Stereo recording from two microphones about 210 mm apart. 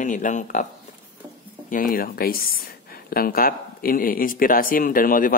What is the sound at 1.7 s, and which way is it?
Speech, 45° left (ahead or behind).